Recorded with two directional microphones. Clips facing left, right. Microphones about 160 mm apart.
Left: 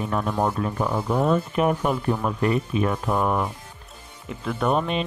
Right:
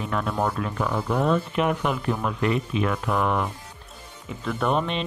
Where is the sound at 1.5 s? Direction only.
40° left (ahead or behind).